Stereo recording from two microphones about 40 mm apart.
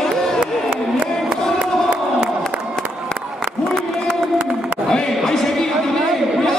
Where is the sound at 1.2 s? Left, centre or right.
Right.